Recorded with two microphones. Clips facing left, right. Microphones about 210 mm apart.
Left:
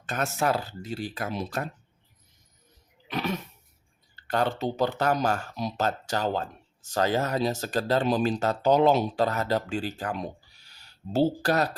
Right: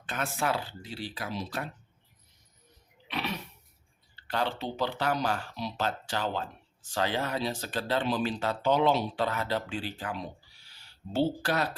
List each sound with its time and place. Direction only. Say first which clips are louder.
0.0 s speech: left 4 dB; 45° left (ahead or behind)
3.1 s roaring cats: left 5 dB; 45° left (ahead or behind)
4.1 s speech: left 5 dB; 45° left (ahead or behind)